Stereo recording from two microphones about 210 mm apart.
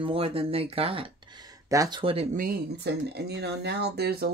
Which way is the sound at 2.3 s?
45° right (ahead or behind).